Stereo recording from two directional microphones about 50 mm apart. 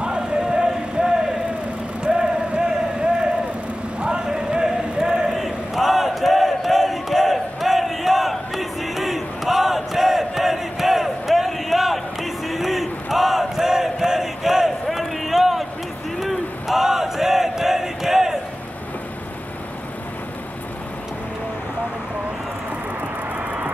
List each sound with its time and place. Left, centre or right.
0.0 s music: centre
2.0 s vehicle: centre
4.0 s a sound: centre
16.2 s crowd: centre